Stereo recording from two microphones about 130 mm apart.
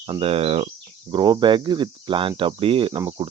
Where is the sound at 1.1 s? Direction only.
35° right (ahead or behind).